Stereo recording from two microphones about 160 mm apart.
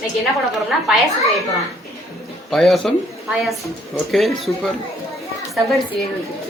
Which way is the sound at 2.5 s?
Centre (ahead or behind).